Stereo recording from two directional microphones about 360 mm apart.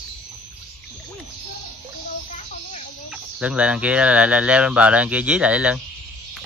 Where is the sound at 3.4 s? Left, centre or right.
Centre.